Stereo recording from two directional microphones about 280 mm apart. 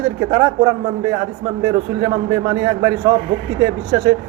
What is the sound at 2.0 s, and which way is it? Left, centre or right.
Speech, centre.